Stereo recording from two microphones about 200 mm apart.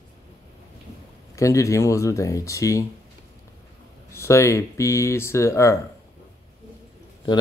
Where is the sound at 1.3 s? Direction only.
15° left (ahead or behind).